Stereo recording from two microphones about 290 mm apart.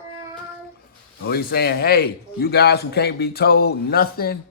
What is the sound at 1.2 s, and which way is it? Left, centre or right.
A man's voice, left.